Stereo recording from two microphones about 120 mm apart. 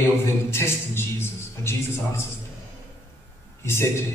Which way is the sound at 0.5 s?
20° left (ahead or behind).